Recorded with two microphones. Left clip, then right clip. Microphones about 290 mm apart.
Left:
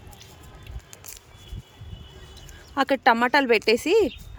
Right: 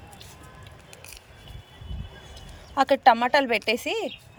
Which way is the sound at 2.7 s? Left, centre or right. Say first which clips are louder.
Right 2 dB; centre.